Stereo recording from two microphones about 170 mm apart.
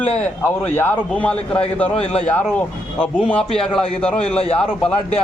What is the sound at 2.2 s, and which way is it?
Speech, 10° left (ahead or behind).